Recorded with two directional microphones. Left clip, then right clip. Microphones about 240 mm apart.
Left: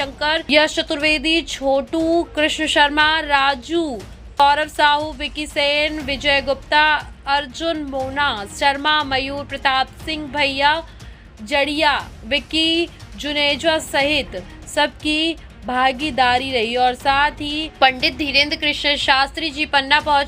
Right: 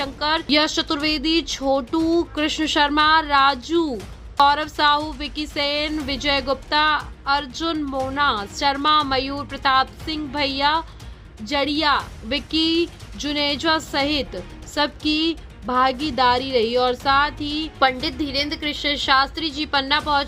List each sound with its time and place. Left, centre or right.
0.0 s a woman's voice: centre